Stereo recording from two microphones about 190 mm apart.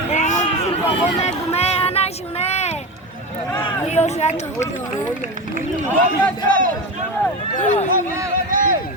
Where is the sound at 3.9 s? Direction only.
35° left (ahead or behind).